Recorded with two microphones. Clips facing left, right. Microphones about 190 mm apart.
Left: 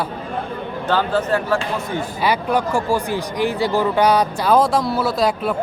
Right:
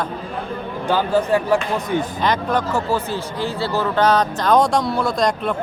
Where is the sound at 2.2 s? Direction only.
10° left (ahead or behind).